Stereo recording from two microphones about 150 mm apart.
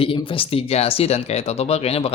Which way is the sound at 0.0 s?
35° left (ahead or behind).